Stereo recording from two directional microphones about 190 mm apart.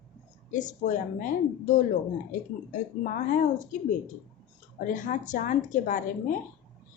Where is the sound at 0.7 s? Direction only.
40° left (ahead or behind).